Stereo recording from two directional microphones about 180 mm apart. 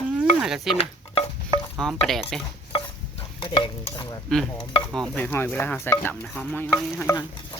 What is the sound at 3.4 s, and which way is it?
Stir, 25° left (ahead or behind).